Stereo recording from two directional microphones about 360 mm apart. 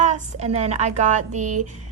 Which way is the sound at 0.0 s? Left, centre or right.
Centre.